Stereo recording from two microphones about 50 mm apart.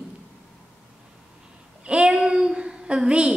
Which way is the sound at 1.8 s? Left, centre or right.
Centre.